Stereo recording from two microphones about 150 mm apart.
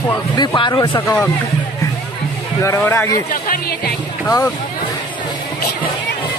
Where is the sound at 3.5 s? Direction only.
90° left.